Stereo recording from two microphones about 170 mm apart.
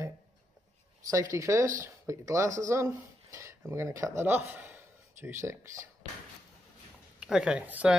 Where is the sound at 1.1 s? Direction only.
20° right (ahead or behind).